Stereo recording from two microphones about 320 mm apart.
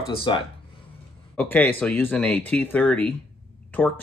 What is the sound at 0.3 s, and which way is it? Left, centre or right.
Speech, centre.